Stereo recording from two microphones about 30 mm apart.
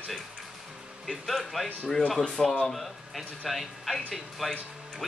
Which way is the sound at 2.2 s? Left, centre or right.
Centre.